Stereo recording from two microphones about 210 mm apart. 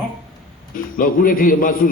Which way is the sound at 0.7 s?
40° left (ahead or behind).